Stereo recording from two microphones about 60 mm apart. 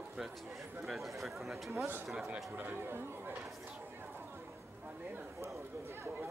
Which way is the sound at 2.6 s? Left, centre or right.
Right.